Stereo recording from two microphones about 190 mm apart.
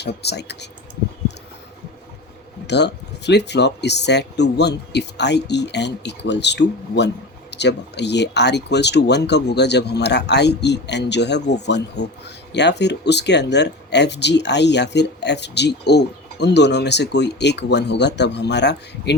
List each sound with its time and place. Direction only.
0.0 s speech: 60° left (ahead or behind)
2.6 s speech: 65° left (ahead or behind)